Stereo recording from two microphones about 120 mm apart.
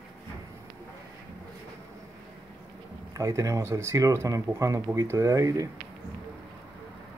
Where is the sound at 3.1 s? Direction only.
25° right (ahead or behind).